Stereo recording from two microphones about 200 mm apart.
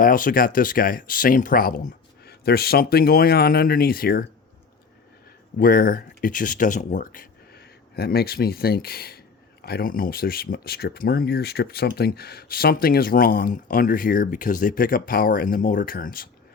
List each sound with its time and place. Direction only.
0.0 s speech: 45° left (ahead or behind)
5.5 s speech: 45° left (ahead or behind)